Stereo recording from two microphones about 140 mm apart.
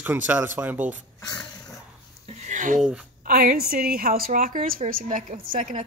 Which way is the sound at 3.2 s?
90° right.